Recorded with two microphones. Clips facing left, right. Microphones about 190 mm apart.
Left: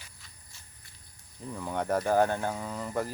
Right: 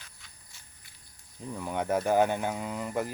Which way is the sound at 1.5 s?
15° right (ahead or behind).